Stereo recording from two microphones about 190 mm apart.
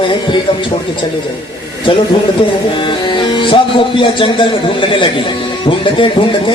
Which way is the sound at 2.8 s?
25° left (ahead or behind).